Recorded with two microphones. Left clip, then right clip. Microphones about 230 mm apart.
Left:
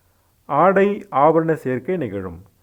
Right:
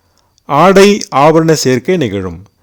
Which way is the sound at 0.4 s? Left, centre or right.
Right.